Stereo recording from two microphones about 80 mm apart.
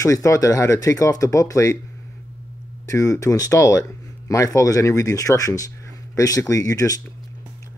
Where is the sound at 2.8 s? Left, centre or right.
Left.